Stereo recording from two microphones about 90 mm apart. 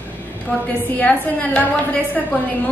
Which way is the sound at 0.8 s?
15° left (ahead or behind).